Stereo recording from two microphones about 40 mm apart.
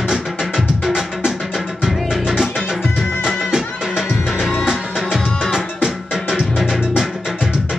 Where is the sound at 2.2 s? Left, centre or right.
Centre.